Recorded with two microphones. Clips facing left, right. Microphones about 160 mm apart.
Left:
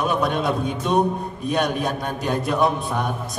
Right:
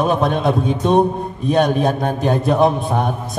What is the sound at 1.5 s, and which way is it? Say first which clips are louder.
A man's voice: right 7 dB; 50° right (ahead or behind).